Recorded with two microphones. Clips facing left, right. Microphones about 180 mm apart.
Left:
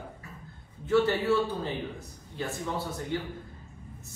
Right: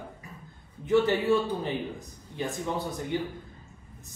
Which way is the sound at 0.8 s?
15° right (ahead or behind).